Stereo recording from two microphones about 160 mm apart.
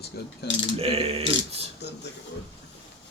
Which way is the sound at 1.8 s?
90° left.